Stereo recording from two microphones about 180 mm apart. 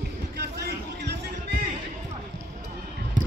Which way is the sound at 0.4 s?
65° right (ahead or behind).